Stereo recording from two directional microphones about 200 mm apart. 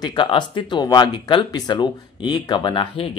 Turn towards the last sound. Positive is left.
turn(degrees=25)  # may be behind; listen again after turning